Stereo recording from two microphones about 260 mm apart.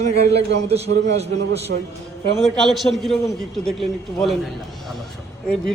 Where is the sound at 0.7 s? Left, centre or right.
Right.